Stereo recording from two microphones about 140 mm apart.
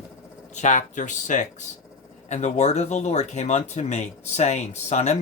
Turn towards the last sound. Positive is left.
turn(degrees=55)  # may be behind; listen again after turning